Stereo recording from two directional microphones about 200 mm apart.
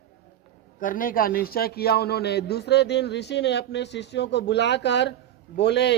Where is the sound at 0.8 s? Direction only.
45° left (ahead or behind).